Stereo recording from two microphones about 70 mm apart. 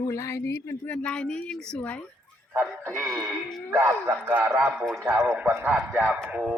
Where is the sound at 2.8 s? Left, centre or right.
Right.